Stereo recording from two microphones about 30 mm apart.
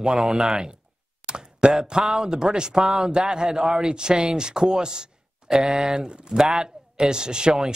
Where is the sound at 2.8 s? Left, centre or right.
Centre.